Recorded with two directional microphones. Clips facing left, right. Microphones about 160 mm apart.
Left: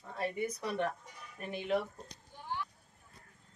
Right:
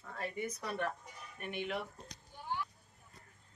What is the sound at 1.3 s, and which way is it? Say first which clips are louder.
Speech: left 5 dB; 35° left (ahead or behind).